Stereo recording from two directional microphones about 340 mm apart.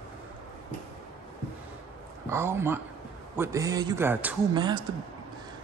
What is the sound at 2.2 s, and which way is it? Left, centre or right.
Speech, centre.